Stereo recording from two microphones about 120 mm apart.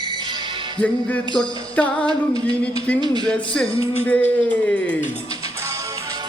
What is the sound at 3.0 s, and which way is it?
Speech, 35° right (ahead or behind).